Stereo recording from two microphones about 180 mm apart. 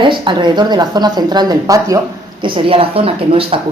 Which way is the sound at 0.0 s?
25° right (ahead or behind).